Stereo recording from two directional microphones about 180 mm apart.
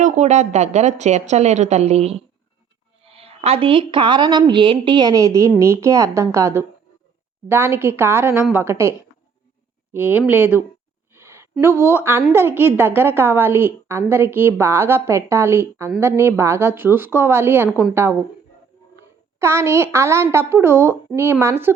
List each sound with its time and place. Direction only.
0.0 s a woman's voice: 40° right (ahead or behind); by 10.7 s 10° right (ahead or behind)
11.1 s a sound: 15° right (ahead or behind)
11.8 s a woman's voice: 15° right (ahead or behind)
17.7 s a woman's voice: 5° right (ahead or behind)
19.4 s a woman's voice: 15° right (ahead or behind)